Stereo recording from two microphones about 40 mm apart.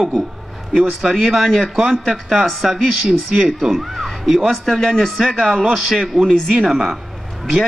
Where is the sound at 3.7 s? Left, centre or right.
Centre.